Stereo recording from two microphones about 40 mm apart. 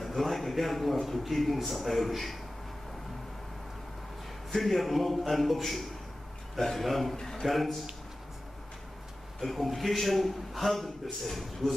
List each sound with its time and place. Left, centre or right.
0.0 s a man's voice: centre
4.6 s a man's voice: centre
7.2 s a sound: centre
7.4 s a man's voice: centre
9.4 s a man's voice: centre